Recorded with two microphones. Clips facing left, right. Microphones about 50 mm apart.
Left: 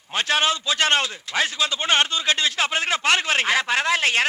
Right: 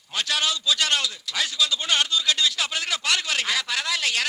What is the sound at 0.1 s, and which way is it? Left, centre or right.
A man's voice, left.